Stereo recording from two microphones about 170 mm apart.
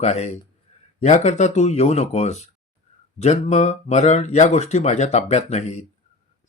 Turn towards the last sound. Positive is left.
turn(degrees=45)  # may be behind; listen again after turning